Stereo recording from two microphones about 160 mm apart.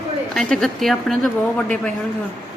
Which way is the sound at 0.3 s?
5° left (ahead or behind).